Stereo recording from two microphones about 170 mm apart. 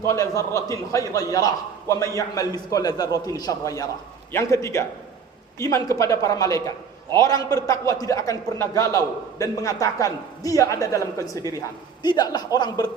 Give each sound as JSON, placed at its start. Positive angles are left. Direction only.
{"t": 0.0, "sound": "a man's voice", "side_deg": 20}
{"t": 12.0, "sound": "a man's voice", "side_deg": 25}